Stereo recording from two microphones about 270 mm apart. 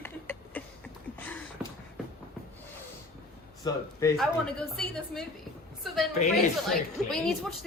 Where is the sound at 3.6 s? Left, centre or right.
Centre.